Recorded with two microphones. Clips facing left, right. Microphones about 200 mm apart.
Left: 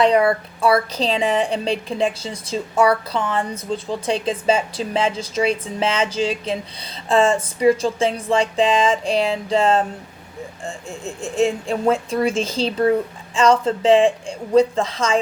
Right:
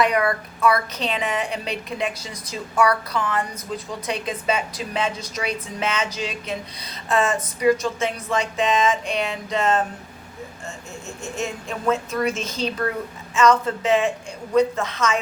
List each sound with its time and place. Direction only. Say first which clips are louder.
0.0 s a woman's voice: left 5 dB; 30° left (ahead or behind)
7.1 s music: left 5 dB; 30° left (ahead or behind)
13.3 s a woman's voice: left 2 dB; 30° left (ahead or behind)